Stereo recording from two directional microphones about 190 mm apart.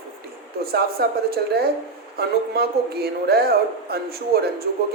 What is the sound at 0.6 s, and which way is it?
Speech, 55° right (ahead or behind).